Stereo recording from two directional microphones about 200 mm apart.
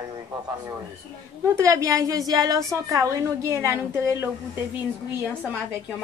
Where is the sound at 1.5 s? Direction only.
15° right (ahead or behind).